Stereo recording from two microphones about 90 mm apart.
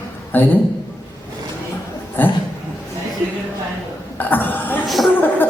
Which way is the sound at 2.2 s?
20° left (ahead or behind).